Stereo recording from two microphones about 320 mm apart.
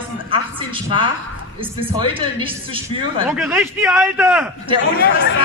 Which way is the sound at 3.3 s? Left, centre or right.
Centre.